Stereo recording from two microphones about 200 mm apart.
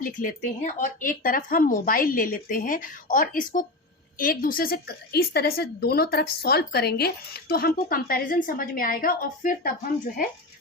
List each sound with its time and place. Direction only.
0.2 s a woman's voice: 40° left (ahead or behind)